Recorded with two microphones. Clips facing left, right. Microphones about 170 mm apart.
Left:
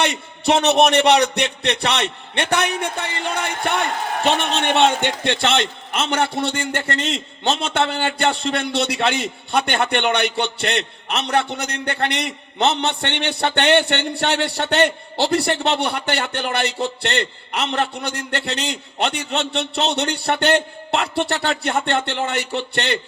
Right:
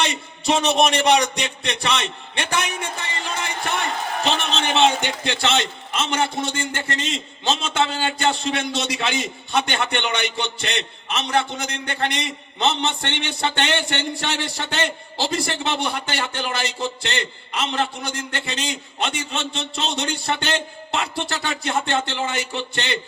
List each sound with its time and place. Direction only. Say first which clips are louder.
0.0 s a man's voice: left 3 dB; 60° left (ahead or behind)